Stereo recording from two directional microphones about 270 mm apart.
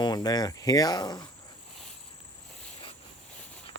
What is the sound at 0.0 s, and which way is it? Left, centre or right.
Speech, centre.